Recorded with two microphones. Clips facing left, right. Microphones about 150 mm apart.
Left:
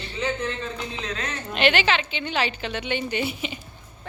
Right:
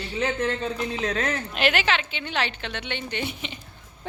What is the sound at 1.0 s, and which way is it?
Speech, 50° right (ahead or behind).